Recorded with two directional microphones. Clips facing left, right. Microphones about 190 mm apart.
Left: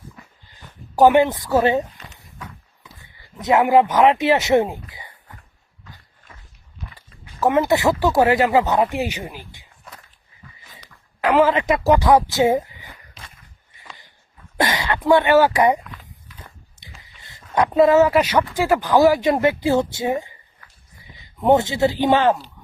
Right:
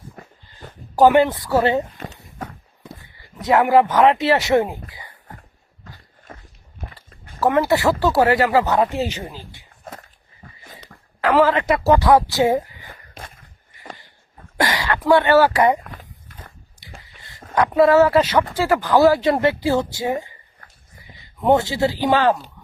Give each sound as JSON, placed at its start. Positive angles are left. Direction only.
{"t": 0.9, "sound": "speech", "side_deg": 20}
{"t": 2.4, "sound": "walk", "side_deg": -50}
{"t": 3.0, "sound": "speech", "side_deg": 20}
{"t": 5.3, "sound": "a sound", "side_deg": -45}
{"t": 7.3, "sound": "speech", "side_deg": 20}
{"t": 11.2, "sound": "a woman's voice", "side_deg": 15}
{"t": 12.9, "sound": "wheeze", "side_deg": -50}
{"t": 14.6, "sound": "speech", "side_deg": 20}
{"t": 15.8, "sound": "a sound", "side_deg": -45}
{"t": 16.8, "sound": "biting", "side_deg": 20}
{"t": 17.2, "sound": "a sound", "side_deg": 20}
{"t": 17.5, "sound": "speech", "side_deg": 20}